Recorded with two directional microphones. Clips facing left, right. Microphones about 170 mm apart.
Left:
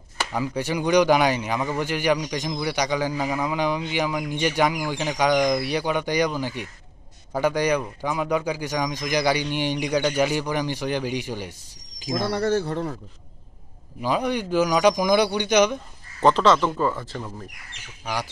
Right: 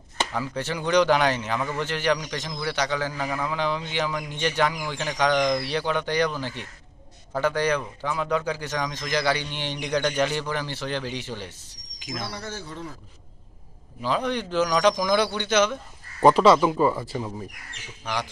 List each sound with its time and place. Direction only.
0.3 s speech: 15° left (ahead or behind)
12.0 s speech: 35° left (ahead or behind)
12.3 s speech: 60° left (ahead or behind)
14.0 s speech: 10° left (ahead or behind)
16.2 s speech: 10° right (ahead or behind)
18.0 s speech: 10° left (ahead or behind)